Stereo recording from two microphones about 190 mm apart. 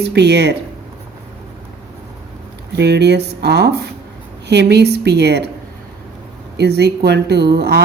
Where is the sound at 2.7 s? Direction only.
60° right (ahead or behind).